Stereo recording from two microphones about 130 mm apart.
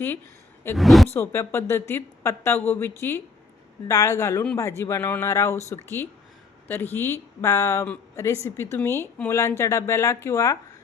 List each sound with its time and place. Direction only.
0.8 s speech: centre (ahead or behind)
1.1 s speech: 20° left (ahead or behind)